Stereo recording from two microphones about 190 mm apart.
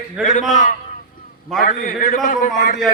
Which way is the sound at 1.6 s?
50° left (ahead or behind).